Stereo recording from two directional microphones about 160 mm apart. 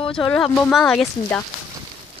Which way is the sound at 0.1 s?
5° left (ahead or behind).